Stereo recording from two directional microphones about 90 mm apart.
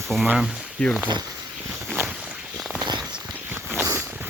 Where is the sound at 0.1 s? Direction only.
5° left (ahead or behind).